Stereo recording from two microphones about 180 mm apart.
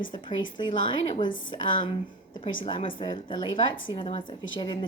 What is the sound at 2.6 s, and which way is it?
A woman's voice, 25° left (ahead or behind).